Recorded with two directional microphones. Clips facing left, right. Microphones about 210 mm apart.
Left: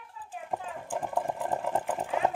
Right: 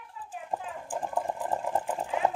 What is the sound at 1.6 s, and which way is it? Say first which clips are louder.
Sewing machine: even; 60° left (ahead or behind).